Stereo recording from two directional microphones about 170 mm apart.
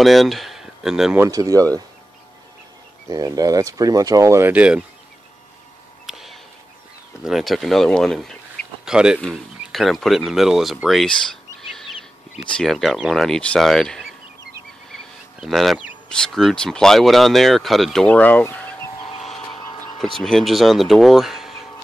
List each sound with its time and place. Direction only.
0.0 s speech: centre (ahead or behind)
1.2 s speech: 20° right (ahead or behind)
3.1 s speech: 20° right (ahead or behind)
6.0 s a sound: centre (ahead or behind)
7.2 s speech: centre (ahead or behind)
9.3 s a sound: centre (ahead or behind)
12.4 s speech: 5° left (ahead or behind)
19.2 s vehicle: centre (ahead or behind)
20.2 s speech: centre (ahead or behind)